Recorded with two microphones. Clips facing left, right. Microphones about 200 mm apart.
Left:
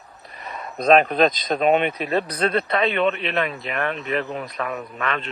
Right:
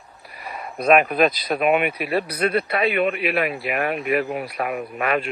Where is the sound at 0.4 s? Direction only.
10° right (ahead or behind).